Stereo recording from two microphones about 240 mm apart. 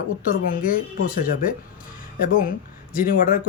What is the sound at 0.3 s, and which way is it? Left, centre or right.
Speech, left.